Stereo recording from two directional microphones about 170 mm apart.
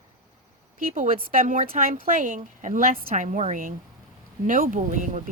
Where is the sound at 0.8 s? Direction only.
55° right (ahead or behind).